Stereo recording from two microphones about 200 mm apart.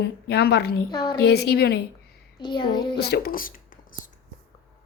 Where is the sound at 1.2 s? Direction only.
55° left (ahead or behind).